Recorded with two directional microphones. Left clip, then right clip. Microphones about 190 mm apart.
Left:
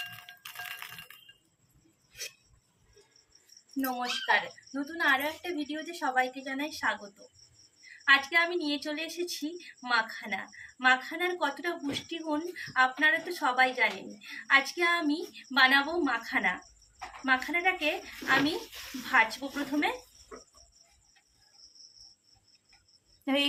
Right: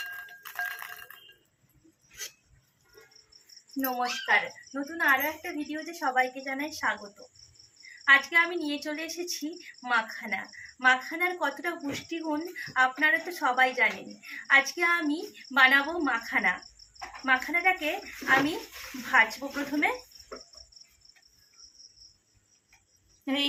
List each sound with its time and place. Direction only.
3.8 s a woman's voice: 5° left (ahead or behind)
19.4 s speech: 15° right (ahead or behind)
23.2 s a sound: 15° left (ahead or behind)